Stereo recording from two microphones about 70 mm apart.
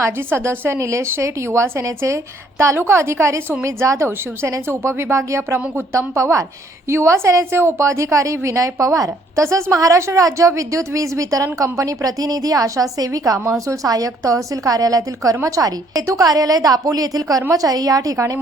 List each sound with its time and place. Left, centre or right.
0.0 s a woman's voice: right